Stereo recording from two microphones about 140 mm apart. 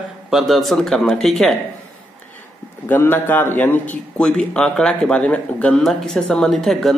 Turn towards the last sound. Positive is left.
turn(degrees=0)  # may be behind; listen again after turning